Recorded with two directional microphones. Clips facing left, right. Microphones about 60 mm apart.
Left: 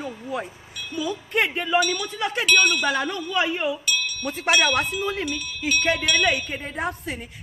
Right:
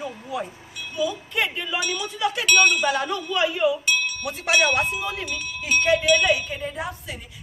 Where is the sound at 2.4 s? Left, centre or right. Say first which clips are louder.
Right 1 dB; centre.